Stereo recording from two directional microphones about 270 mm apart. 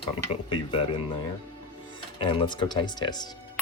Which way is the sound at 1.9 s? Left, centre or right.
Centre.